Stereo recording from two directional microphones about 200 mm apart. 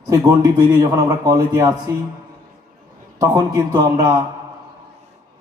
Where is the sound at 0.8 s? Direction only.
20° right (ahead or behind).